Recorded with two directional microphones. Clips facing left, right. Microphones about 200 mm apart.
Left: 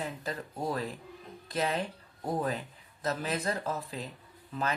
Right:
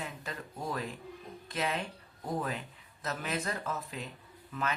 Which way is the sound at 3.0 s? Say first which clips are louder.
Left 4 dB; 35° left (ahead or behind).